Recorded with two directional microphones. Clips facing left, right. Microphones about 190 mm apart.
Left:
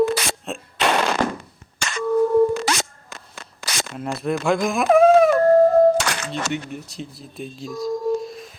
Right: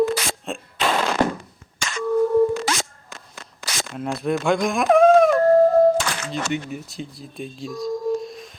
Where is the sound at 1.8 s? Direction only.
70° left (ahead or behind).